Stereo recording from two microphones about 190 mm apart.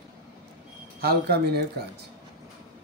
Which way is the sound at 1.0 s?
55° right (ahead or behind).